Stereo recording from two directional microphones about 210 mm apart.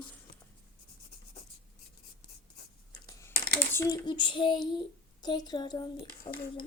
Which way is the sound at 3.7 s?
15° left (ahead or behind).